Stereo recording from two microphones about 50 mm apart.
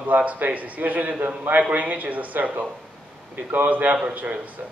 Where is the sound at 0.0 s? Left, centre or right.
Right.